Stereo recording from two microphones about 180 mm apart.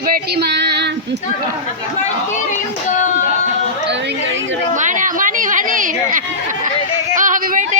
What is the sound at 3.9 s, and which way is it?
Chatter, 75° right (ahead or behind).